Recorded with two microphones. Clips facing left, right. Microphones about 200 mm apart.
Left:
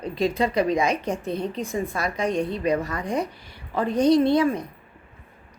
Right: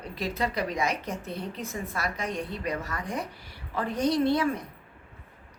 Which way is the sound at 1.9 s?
20° left (ahead or behind).